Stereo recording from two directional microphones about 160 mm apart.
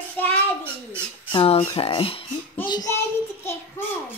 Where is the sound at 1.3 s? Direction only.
35° left (ahead or behind).